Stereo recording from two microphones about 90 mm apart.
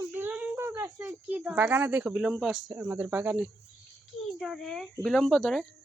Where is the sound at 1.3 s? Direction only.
20° right (ahead or behind).